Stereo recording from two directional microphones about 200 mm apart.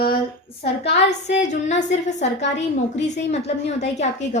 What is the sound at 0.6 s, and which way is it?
Speech, 60° left (ahead or behind).